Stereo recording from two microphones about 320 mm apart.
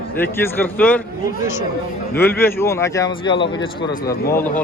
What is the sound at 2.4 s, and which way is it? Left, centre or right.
Speech, centre.